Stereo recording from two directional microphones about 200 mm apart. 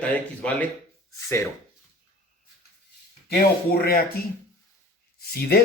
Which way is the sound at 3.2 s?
50° left (ahead or behind).